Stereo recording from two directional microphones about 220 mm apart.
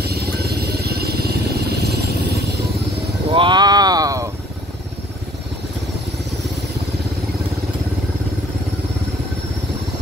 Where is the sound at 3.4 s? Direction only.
20° right (ahead or behind).